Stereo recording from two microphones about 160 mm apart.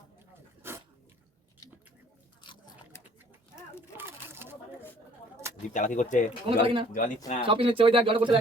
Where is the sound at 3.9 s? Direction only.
15° right (ahead or behind).